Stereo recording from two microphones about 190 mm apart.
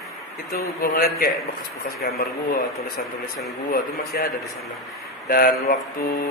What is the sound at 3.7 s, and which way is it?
A man's voice, 50° left (ahead or behind).